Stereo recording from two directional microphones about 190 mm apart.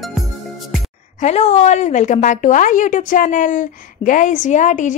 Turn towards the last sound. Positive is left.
turn(degrees=40)  # may be behind; listen again after turning